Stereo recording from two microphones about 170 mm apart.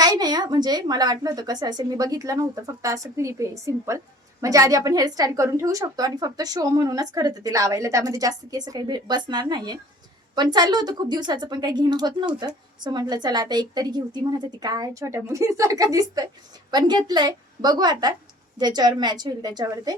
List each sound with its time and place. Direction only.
0.0 s a woman's voice: 25° right (ahead or behind)